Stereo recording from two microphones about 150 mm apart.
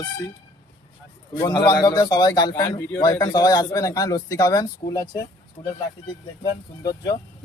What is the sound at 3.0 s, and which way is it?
Speech, 25° left (ahead or behind).